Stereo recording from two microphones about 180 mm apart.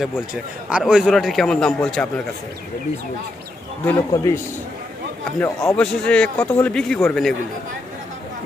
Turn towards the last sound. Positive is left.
turn(degrees=10)  # may be behind; listen again after turning